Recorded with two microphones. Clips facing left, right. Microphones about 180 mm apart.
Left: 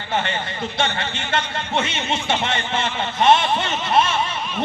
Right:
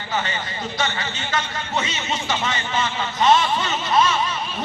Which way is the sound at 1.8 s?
60° left (ahead or behind).